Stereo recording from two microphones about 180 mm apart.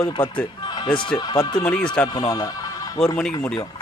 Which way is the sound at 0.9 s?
25° left (ahead or behind).